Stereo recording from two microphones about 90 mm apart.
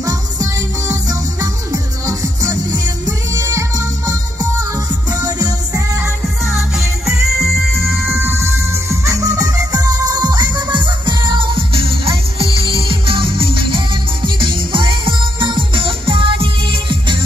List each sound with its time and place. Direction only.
0.0 s music: 40° right (ahead or behind)
6.8 s music: centre (ahead or behind)
7.7 s music: 25° right (ahead or behind); by 17.2 s 70° right (ahead or behind)